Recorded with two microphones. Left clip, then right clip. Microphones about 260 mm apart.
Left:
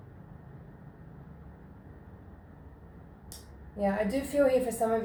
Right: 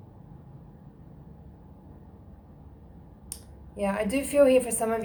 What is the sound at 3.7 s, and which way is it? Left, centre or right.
A woman's voice, right.